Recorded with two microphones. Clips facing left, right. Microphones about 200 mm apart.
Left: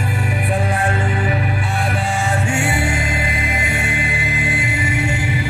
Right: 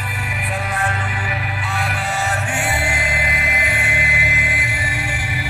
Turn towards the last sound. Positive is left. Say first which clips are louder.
# left 6 dB
turn(degrees=25)  # may be behind; listen again after turning